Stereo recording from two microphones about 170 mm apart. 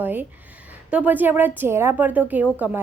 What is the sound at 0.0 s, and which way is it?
A woman's voice, 10° right (ahead or behind).